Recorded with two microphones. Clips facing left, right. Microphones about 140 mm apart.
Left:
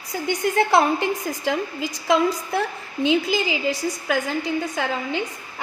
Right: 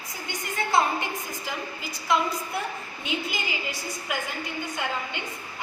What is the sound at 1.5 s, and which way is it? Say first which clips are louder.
A woman's voice: left 13 dB; 90° left.